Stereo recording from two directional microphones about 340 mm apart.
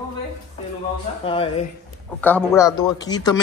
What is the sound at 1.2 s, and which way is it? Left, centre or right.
Speech, centre.